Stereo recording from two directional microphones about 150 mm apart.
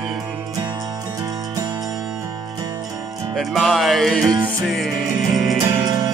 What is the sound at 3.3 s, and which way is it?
Music, centre (ahead or behind).